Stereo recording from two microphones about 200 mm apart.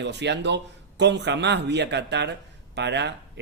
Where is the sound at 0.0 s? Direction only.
60° right (ahead or behind).